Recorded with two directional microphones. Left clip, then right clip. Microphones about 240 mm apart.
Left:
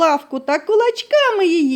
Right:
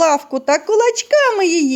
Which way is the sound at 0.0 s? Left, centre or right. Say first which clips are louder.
Right 2 dB; centre.